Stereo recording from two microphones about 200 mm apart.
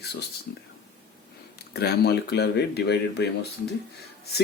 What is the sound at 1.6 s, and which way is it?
Speech, 55° left (ahead or behind).